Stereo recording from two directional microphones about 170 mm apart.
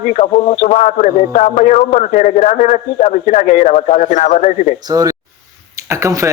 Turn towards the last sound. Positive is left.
turn(degrees=-15)  # may be behind; listen again after turning